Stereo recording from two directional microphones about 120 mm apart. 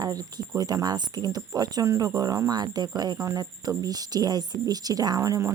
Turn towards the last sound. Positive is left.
turn(degrees=-30)  # may be behind; listen again after turning